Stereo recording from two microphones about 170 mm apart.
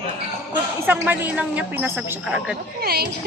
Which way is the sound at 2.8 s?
70° right (ahead or behind).